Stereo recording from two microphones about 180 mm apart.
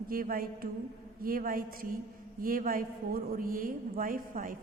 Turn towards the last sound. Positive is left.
turn(degrees=-50)  # may be behind; listen again after turning